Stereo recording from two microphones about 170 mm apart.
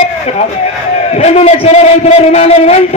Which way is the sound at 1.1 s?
40° left (ahead or behind).